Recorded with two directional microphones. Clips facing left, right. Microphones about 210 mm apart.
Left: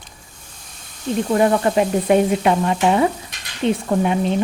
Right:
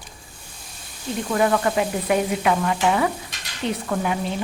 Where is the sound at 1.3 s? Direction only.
30° left (ahead or behind).